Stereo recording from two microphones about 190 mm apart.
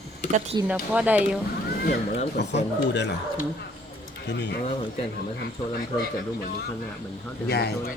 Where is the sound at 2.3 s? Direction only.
65° left (ahead or behind).